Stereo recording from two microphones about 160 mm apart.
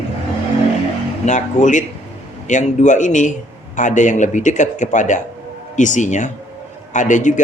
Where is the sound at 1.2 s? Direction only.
50° left (ahead or behind).